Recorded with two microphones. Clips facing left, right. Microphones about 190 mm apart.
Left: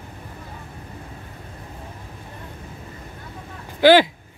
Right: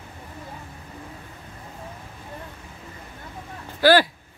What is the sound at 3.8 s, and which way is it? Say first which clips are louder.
Speech: left 4 dB; 20° left (ahead or behind).